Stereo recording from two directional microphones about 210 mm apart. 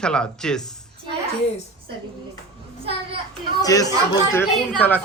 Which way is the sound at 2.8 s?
25° right (ahead or behind).